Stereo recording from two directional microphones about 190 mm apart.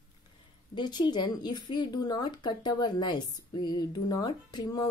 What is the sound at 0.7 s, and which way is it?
A woman's voice, 25° left (ahead or behind).